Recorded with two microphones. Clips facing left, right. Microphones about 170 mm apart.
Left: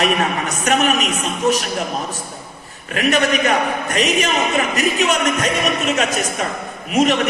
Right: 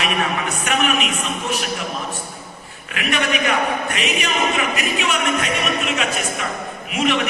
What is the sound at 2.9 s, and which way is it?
A man's voice, 40° left (ahead or behind).